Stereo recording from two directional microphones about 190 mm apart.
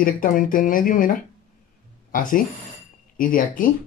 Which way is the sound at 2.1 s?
45° left (ahead or behind).